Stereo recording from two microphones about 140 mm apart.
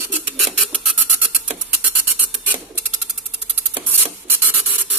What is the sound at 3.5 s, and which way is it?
Rub, 15° right (ahead or behind).